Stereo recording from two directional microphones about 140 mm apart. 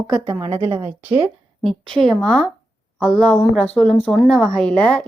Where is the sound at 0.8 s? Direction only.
10° right (ahead or behind).